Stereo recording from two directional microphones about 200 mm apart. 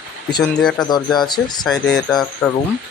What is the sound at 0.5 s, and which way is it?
Speech, 5° left (ahead or behind).